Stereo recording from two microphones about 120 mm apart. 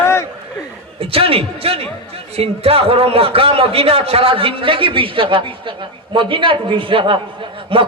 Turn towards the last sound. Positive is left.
turn(degrees=-50)  # may be behind; listen again after turning